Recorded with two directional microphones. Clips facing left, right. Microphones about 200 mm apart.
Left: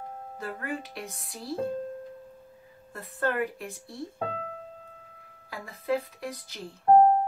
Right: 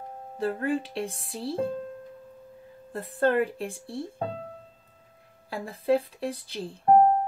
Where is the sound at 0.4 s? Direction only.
30° right (ahead or behind).